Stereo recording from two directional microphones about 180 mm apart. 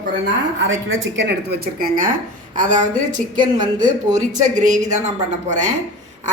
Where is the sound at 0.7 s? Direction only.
90° right.